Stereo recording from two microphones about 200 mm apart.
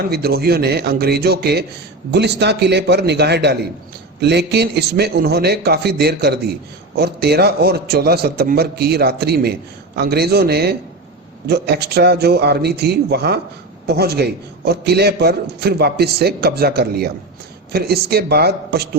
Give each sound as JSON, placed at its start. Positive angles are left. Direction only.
{"t": 0.1, "sound": "a man's voice", "side_deg": -50}